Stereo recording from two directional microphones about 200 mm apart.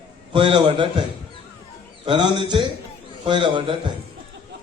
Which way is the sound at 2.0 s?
25° right (ahead or behind).